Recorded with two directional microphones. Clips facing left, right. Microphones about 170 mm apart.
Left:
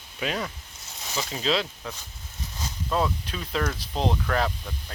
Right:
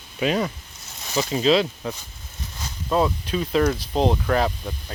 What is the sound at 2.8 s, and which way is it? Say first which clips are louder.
Speech: right 5 dB; 15° right (ahead or behind).